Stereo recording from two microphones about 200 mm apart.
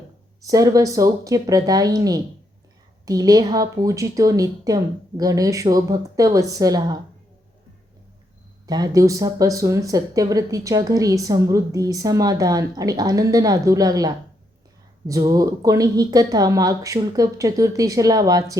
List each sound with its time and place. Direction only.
0.4 s a woman's voice: 15° right (ahead or behind)
8.6 s speech: 20° right (ahead or behind)